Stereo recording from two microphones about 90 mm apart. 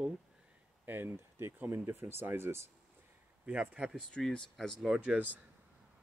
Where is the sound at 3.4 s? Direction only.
10° right (ahead or behind).